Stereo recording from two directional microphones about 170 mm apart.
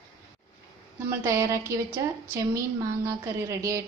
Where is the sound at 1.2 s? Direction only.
20° right (ahead or behind).